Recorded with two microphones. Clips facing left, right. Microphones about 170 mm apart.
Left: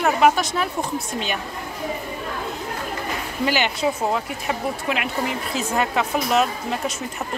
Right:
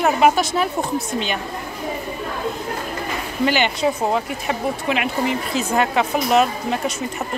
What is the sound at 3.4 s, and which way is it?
A woman's voice, 5° left (ahead or behind).